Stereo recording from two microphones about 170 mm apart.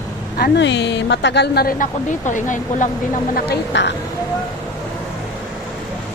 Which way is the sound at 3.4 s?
80° left.